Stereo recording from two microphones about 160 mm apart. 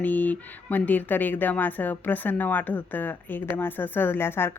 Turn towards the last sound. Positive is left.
turn(degrees=15)  # may be behind; listen again after turning